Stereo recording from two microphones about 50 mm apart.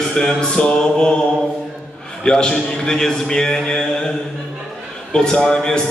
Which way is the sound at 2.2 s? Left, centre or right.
Centre.